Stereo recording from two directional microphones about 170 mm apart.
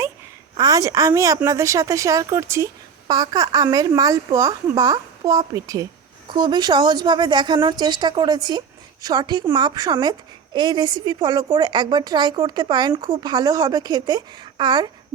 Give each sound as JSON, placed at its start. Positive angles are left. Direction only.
{"t": 0.5, "sound": "a woman's voice", "side_deg": -20}